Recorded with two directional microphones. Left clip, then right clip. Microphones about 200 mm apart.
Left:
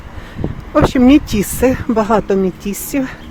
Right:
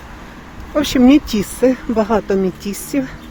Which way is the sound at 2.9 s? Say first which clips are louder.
Left 1 dB; 20° left (ahead or behind).